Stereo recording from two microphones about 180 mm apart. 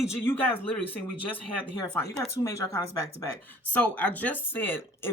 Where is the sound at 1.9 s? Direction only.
10° left (ahead or behind).